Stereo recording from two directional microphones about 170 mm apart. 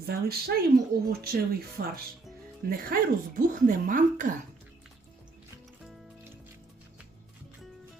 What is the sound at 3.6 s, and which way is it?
Speech, 50° right (ahead or behind).